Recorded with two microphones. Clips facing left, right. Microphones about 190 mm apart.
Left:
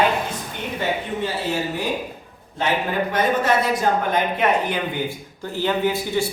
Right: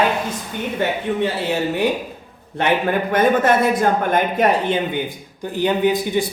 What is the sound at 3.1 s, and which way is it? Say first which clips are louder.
Speech: right 5 dB; 50° right (ahead or behind).